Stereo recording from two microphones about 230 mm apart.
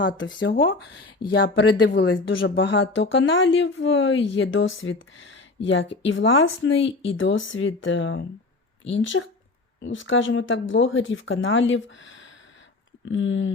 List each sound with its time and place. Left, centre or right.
0.6 s speech: left